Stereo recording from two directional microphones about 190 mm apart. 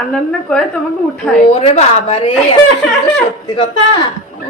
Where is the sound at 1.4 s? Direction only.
35° left (ahead or behind).